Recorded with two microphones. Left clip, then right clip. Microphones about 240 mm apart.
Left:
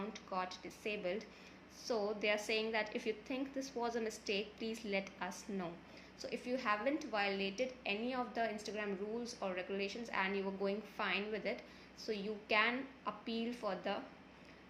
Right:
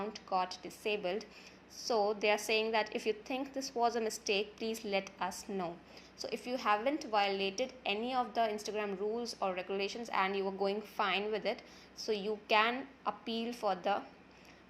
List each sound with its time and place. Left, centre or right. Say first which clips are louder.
0.3 s a woman's voice: right 7 dB; right